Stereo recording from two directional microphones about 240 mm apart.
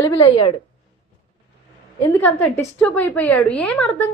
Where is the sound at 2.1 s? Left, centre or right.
Centre.